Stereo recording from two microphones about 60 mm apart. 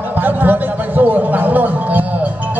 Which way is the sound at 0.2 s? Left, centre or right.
Right.